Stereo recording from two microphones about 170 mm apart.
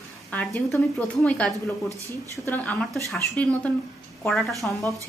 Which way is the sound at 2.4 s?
10° left (ahead or behind).